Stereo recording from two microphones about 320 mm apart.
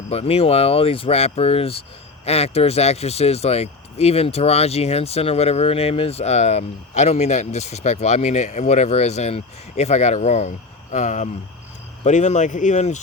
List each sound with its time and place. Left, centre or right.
0.1 s speech: centre